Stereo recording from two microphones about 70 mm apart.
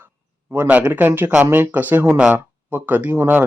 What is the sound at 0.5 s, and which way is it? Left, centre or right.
Speech, right.